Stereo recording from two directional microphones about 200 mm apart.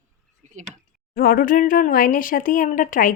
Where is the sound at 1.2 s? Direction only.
45° left (ahead or behind).